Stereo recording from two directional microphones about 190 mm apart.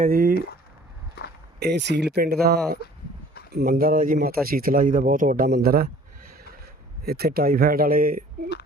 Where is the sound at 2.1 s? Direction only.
55° right (ahead or behind).